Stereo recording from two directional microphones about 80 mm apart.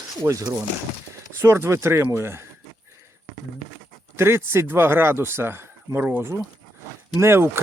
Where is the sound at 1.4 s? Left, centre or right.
Right.